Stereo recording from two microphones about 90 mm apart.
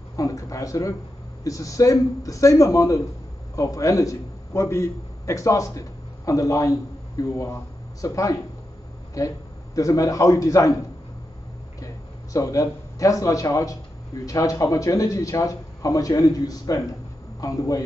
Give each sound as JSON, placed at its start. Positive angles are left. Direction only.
{"t": 0.1, "sound": "a man's voice", "side_deg": 40}
{"t": 11.8, "sound": "speech", "side_deg": 40}